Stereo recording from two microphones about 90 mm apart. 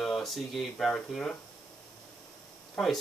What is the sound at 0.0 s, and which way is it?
Speech, 5° left (ahead or behind).